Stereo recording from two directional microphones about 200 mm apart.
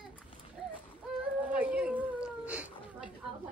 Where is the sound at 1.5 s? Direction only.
5° right (ahead or behind).